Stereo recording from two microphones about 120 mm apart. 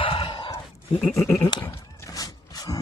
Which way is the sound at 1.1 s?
25° left (ahead or behind).